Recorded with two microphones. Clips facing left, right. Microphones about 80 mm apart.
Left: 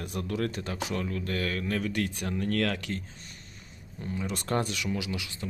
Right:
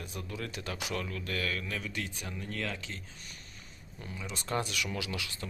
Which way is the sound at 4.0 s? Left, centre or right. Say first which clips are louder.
Left 8 dB; left.